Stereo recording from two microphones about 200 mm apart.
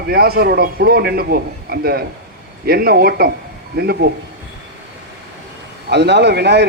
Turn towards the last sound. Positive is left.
turn(degrees=-55)  # may be behind; listen again after turning